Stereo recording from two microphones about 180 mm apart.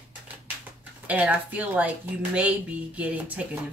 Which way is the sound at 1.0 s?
10° right (ahead or behind).